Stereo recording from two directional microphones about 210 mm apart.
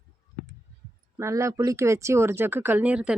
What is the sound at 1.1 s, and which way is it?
Speech, 15° right (ahead or behind).